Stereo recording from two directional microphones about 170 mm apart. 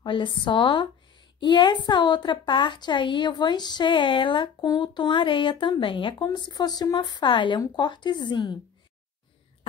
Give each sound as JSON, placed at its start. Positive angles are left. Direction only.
{"t": 0.0, "sound": "a woman's voice", "side_deg": 30}